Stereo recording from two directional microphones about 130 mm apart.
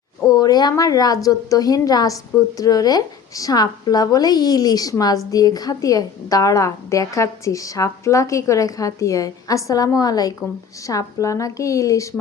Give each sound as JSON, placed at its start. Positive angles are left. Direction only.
{"t": 0.3, "sound": "a woman's voice", "side_deg": 30}